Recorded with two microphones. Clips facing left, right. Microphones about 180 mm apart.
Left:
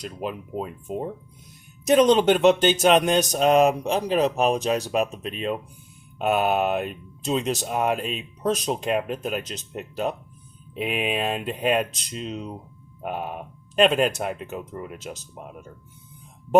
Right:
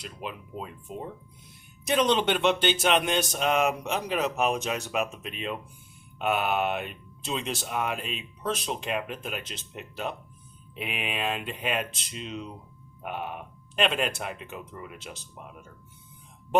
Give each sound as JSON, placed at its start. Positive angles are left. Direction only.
{"t": 0.0, "sound": "speech", "side_deg": 45}